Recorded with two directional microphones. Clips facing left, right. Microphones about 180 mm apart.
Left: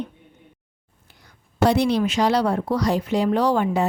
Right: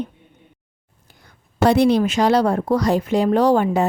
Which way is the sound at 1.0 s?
50° right (ahead or behind).